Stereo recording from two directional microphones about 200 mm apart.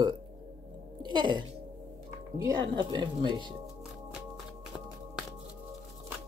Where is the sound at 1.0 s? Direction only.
25° right (ahead or behind).